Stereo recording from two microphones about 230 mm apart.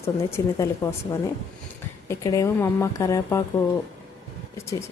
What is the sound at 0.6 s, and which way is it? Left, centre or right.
A woman's voice, centre.